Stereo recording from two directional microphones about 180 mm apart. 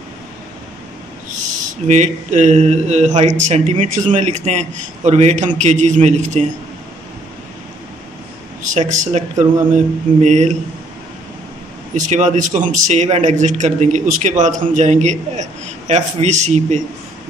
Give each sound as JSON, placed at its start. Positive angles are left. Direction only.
{"t": 1.7, "sound": "a man's voice", "side_deg": -40}
{"t": 8.6, "sound": "a man's voice", "side_deg": -45}
{"t": 11.9, "sound": "a man's voice", "side_deg": -45}